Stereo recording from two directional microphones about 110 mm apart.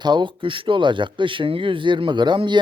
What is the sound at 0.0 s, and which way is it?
Speech, 45° right (ahead or behind).